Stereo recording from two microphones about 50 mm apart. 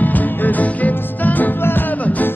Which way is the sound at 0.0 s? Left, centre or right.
Left.